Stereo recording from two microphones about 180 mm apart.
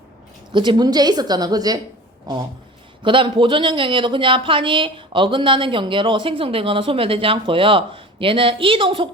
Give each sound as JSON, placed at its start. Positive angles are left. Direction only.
{"t": 0.5, "sound": "speech", "side_deg": -25}
{"t": 3.0, "sound": "speech", "side_deg": -30}